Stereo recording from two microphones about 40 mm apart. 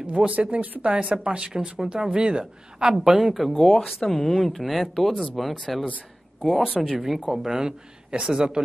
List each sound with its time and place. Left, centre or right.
0.3 s a woman's voice: right
2.9 s speech: centre
3.3 s speech: centre
6.8 s speech: centre